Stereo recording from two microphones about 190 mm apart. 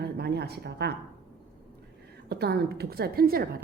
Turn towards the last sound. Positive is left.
turn(degrees=-50)  # may be behind; listen again after turning